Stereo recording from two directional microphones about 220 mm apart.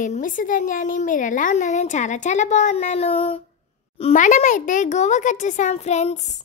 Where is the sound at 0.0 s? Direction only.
35° left (ahead or behind).